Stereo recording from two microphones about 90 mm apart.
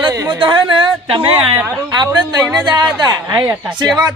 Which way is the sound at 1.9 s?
55° right (ahead or behind).